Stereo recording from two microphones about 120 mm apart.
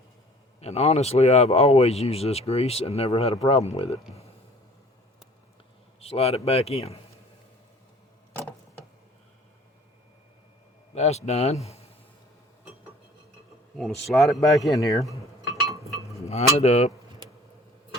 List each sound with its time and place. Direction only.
0.6 s speech: 65° left (ahead or behind)
6.0 s speech: 55° left (ahead or behind)
8.4 s a sound: 15° left (ahead or behind)
10.9 s speech: 65° left (ahead or behind)
13.7 s a man's voice: centre (ahead or behind)
14.7 s a man's voice: 30° left (ahead or behind)
16.1 s cutlery: 60° left (ahead or behind)
16.6 s speech: 65° left (ahead or behind)